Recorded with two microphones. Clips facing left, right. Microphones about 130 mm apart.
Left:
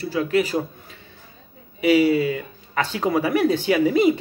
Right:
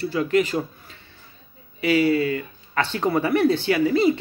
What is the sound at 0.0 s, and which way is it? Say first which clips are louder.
Speech: even; 10° left (ahead or behind).